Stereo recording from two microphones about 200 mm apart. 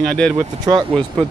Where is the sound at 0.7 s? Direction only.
25° right (ahead or behind).